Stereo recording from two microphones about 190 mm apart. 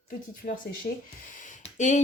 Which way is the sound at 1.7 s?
40° left (ahead or behind).